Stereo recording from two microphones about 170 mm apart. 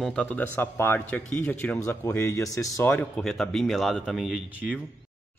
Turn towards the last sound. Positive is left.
turn(degrees=-5)  # may be behind; listen again after turning